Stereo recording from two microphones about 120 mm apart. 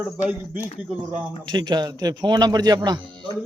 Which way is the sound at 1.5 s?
35° right (ahead or behind).